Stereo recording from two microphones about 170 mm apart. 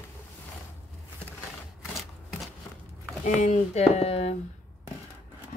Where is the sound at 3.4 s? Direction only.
40° left (ahead or behind).